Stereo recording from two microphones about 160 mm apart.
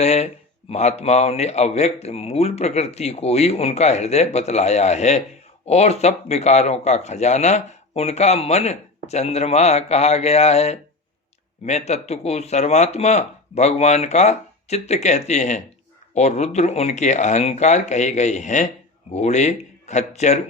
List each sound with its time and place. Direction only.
0.0 s speech: 40° left (ahead or behind)